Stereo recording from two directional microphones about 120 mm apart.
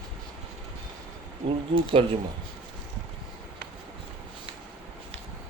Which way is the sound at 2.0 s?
50° right (ahead or behind).